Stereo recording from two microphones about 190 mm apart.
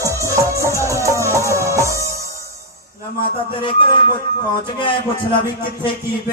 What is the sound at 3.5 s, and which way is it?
Music, 25° left (ahead or behind).